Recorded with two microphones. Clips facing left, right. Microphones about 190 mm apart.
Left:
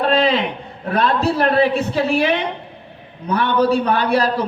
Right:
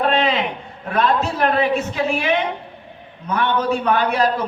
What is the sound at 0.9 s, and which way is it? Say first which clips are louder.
A man's voice: left 1 dB; 35° left (ahead or behind).